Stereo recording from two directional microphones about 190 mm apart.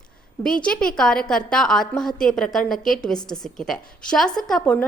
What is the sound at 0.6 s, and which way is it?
A woman's voice, 5° left (ahead or behind).